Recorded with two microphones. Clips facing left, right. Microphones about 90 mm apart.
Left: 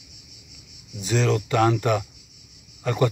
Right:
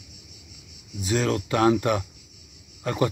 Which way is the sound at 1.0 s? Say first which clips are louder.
Left 2 dB; 5° right (ahead or behind).